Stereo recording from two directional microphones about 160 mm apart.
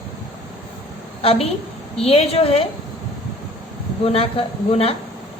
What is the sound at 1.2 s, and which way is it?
A woman's voice, 40° left (ahead or behind).